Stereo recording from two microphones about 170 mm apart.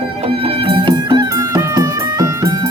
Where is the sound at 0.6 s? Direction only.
30° right (ahead or behind).